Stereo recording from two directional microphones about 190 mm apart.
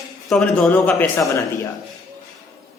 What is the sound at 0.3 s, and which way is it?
A man's voice, 5° left (ahead or behind).